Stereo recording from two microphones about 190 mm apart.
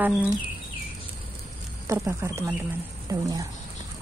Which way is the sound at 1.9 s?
15° right (ahead or behind).